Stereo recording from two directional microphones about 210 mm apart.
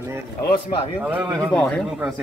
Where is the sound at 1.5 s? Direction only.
5° left (ahead or behind).